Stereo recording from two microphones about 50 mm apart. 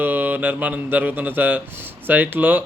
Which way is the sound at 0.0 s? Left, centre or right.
Right.